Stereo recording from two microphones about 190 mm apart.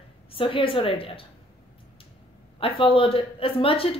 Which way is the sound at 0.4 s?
30° left (ahead or behind).